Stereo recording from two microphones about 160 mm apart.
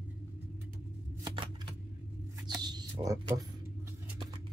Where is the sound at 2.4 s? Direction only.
25° right (ahead or behind).